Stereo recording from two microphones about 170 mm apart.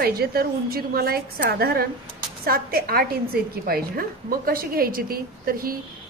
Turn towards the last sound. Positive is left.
turn(degrees=-60)  # may be behind; listen again after turning